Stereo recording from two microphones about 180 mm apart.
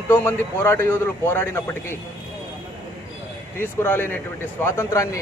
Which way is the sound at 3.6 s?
10° left (ahead or behind).